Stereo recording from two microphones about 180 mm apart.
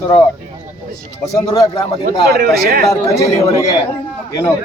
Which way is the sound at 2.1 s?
55° right (ahead or behind).